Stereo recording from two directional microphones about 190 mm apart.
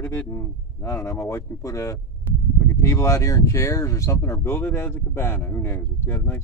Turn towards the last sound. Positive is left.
turn(degrees=10)  # may be behind; listen again after turning